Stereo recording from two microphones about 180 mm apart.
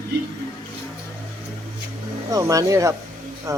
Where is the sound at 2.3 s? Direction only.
20° right (ahead or behind).